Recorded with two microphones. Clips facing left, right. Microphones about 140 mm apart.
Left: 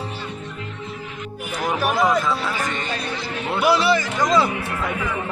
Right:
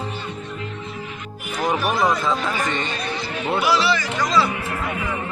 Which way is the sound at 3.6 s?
50° left (ahead or behind).